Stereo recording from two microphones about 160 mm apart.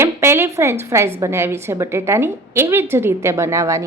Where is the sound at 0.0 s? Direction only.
15° right (ahead or behind).